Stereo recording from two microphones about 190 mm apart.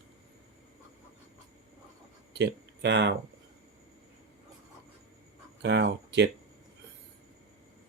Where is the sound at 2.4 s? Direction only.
65° right (ahead or behind).